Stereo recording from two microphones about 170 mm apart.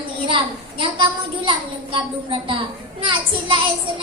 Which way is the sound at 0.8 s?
30° right (ahead or behind).